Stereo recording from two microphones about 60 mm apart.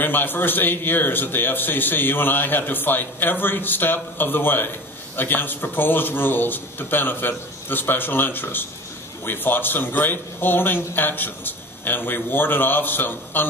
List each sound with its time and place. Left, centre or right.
0.0 s a man's voice: left